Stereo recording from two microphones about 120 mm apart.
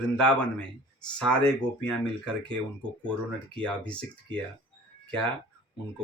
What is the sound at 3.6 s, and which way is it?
Speech, 10° left (ahead or behind).